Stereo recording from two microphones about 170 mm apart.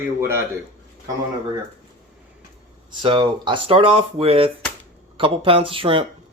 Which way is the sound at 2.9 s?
30° right (ahead or behind).